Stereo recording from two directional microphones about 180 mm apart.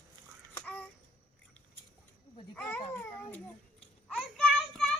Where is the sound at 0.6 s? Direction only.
10° left (ahead or behind).